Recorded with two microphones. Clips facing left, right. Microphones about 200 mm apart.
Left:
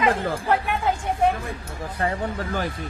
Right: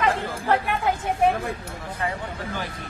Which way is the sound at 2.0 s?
45° left (ahead or behind).